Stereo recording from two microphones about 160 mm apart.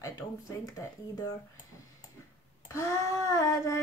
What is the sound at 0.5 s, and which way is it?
Child singing, 20° left (ahead or behind).